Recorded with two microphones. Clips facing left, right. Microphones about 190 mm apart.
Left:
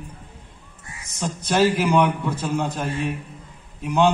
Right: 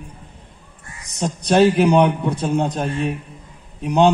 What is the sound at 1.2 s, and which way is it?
A man's voice, 35° right (ahead or behind).